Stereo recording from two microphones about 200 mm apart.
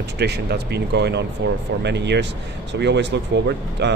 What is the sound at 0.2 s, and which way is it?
Speech, 55° right (ahead or behind).